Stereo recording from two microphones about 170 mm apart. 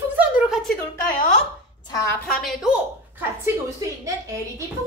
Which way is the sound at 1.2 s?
50° left (ahead or behind).